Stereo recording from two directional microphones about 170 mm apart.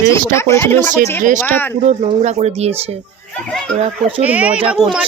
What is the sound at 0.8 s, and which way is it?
Speech, 50° right (ahead or behind).